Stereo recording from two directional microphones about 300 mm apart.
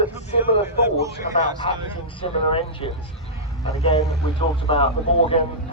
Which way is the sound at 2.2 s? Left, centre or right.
Centre.